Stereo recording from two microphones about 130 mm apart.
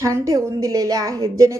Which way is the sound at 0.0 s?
25° right (ahead or behind).